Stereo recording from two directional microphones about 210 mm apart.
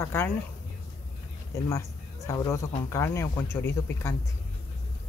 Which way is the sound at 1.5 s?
15° left (ahead or behind).